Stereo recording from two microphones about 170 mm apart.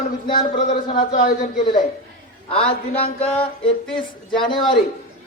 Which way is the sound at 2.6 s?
35° left (ahead or behind).